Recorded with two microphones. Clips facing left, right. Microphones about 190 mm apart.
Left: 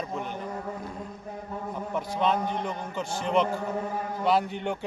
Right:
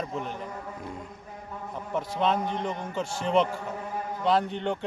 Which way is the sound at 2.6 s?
25° right (ahead or behind).